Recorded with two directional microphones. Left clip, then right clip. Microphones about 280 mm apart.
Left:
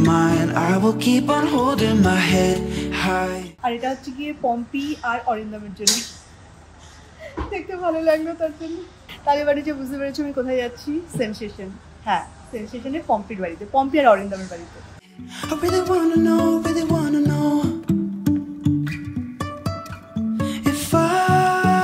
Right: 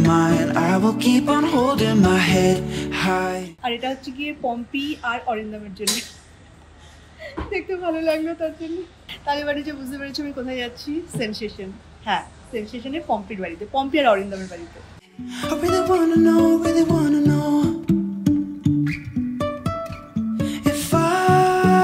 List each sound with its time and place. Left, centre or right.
0.0 s music: centre
7.5 s a woman's voice: centre
15.2 s music: centre